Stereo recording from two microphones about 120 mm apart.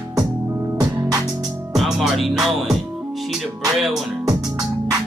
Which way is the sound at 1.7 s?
Centre (ahead or behind).